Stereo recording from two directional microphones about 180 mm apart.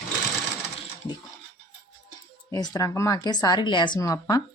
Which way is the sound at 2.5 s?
20° left (ahead or behind).